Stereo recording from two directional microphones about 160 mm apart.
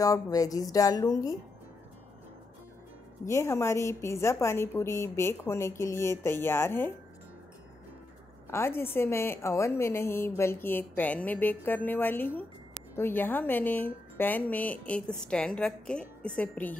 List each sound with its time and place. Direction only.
0.0 s speech: 20° left (ahead or behind)
3.3 s a woman's voice: 15° left (ahead or behind)
8.5 s a woman's voice: 15° left (ahead or behind)